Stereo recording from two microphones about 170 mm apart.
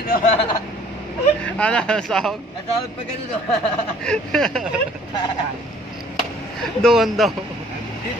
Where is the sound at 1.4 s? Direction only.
5° left (ahead or behind).